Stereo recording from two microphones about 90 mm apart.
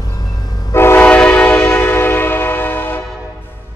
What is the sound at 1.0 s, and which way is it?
Train horn, 15° left (ahead or behind).